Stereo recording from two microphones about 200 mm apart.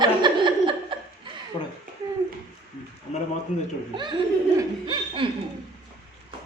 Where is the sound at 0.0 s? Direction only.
25° right (ahead or behind).